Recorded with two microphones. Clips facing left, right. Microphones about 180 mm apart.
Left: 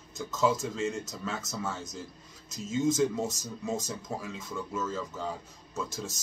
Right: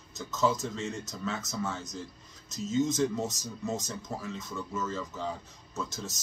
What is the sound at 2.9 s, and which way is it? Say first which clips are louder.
Speech: left 1 dB; 5° left (ahead or behind).